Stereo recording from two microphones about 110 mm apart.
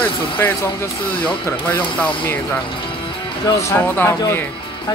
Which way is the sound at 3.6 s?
25° left (ahead or behind).